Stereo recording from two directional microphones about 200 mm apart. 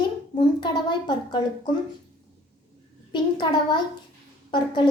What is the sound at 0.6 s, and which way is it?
A child's voice, 20° left (ahead or behind).